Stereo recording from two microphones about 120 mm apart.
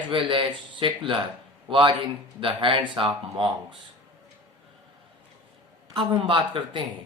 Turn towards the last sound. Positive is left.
turn(degrees=-45)  # may be behind; listen again after turning